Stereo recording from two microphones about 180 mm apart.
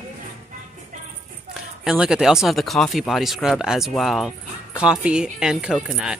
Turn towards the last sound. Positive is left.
turn(degrees=-5)  # may be behind; listen again after turning